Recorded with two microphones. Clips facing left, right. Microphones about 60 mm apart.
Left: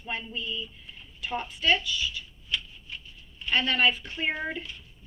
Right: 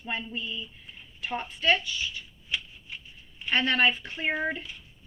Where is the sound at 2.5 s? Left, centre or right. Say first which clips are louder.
Left 1 dB; right.